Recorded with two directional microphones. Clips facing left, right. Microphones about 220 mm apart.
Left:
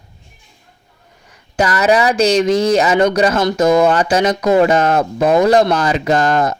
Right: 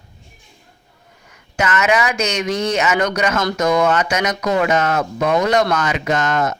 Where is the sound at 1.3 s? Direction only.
35° left (ahead or behind).